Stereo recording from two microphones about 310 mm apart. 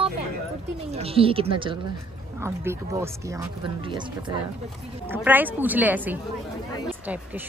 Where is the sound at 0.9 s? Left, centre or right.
Centre.